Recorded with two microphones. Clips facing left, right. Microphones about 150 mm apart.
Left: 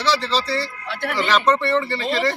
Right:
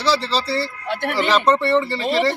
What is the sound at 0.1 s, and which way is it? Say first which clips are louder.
Speech: right 1 dB; 35° right (ahead or behind).